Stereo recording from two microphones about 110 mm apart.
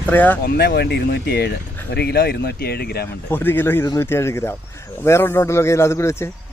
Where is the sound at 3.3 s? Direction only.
20° left (ahead or behind).